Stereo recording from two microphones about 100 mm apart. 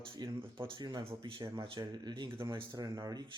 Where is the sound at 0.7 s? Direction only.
45° right (ahead or behind).